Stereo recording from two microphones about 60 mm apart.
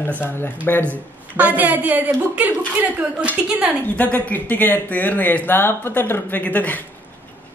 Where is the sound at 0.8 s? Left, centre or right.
Right.